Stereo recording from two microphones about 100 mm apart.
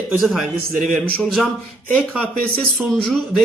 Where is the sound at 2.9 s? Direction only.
Centre (ahead or behind).